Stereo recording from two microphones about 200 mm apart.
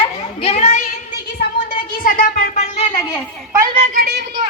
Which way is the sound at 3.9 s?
50° right (ahead or behind).